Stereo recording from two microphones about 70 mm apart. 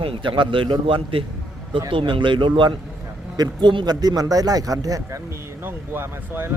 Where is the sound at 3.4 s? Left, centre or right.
Right.